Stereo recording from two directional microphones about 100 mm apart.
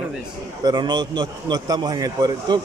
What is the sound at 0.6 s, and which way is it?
Speech, 45° right (ahead or behind).